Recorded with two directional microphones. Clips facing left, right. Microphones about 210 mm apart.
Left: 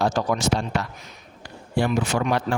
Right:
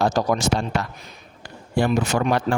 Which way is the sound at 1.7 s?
45° right (ahead or behind).